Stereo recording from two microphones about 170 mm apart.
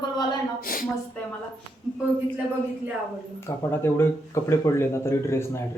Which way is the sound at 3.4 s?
15° left (ahead or behind).